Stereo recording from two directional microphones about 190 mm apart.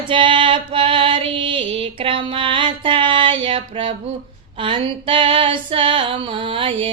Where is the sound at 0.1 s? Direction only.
25° right (ahead or behind).